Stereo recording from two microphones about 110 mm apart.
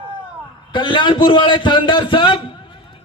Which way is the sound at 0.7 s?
45° left (ahead or behind).